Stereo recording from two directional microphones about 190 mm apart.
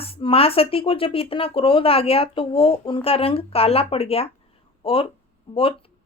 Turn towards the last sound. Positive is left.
turn(degrees=30)  # may be behind; listen again after turning